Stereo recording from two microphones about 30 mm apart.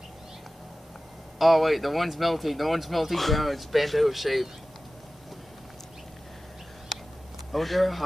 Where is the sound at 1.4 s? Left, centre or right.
Centre.